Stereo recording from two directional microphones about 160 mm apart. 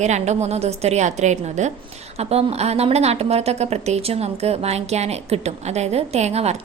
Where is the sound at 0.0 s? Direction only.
45° right (ahead or behind).